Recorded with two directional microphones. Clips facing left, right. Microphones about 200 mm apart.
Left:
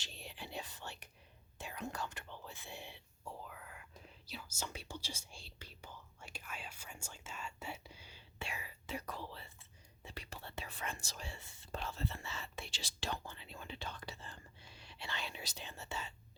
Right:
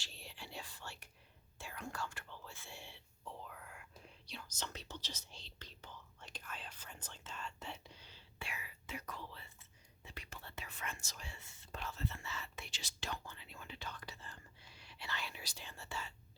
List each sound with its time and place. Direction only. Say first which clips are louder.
0.0 s whispering: left 3 dB; 20° left (ahead or behind)
3.3 s whispering: left 1 dB; centre (ahead or behind)
8.4 s whispering: left 3 dB; 30° left (ahead or behind)
10.0 s speech: left 4 dB; 30° left (ahead or behind)